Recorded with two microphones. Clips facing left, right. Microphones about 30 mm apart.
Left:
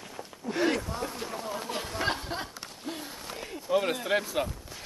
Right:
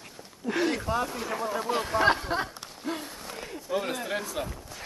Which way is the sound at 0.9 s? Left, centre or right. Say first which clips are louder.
Right 8 dB; right.